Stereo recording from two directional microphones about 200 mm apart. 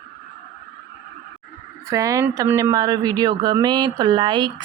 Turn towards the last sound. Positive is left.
turn(degrees=-25)  # may be behind; listen again after turning